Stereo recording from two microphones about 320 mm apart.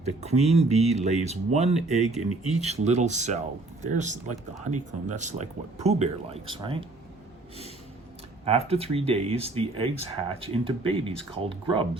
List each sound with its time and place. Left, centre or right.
0.0 s speech: centre
8.4 s speech: centre